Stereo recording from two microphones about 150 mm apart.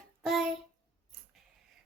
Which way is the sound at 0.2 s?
Centre (ahead or behind).